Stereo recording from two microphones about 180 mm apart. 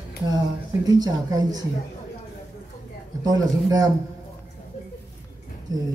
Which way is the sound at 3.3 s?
20° right (ahead or behind).